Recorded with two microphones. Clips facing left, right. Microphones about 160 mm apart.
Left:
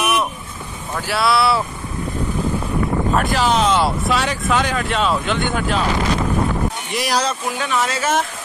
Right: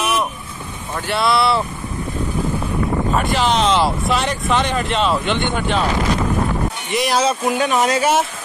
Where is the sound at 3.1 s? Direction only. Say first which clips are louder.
Even; centre (ahead or behind).